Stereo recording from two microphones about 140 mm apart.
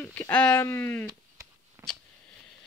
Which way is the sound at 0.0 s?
10° left (ahead or behind).